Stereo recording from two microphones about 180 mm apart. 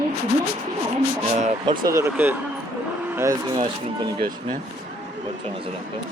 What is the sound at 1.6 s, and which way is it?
Speech, 20° right (ahead or behind).